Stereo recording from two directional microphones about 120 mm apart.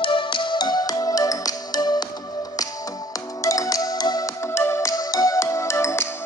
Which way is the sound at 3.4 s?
30° left (ahead or behind).